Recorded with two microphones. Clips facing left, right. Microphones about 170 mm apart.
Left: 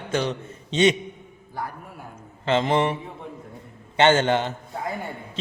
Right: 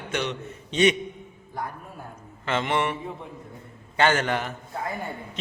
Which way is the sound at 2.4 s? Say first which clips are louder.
Left 4 dB; 30° left (ahead or behind).